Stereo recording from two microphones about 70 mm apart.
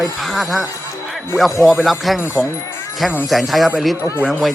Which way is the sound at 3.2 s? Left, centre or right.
Centre.